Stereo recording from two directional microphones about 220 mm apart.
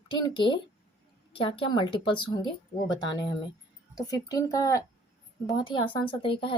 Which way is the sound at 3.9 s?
15° left (ahead or behind).